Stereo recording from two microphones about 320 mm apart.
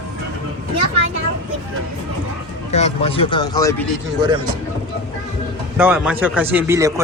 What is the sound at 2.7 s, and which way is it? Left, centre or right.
Speech, centre.